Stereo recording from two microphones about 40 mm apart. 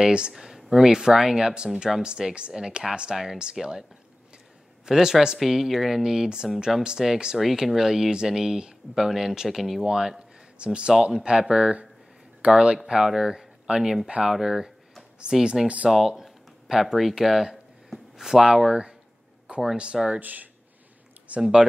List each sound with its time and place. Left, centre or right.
0.0 s speech: right
0.3 s speech: centre
4.8 s speech: centre
6.2 s speech: right
7.3 s speech: centre
10.6 s speech: right
15.9 s a sound: centre
16.8 s speech: centre
19.8 s speech: right
20.2 s speech: right
21.4 s speech: centre